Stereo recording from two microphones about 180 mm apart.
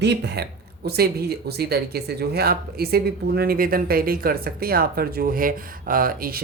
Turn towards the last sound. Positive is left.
turn(degrees=-55)  # may be behind; listen again after turning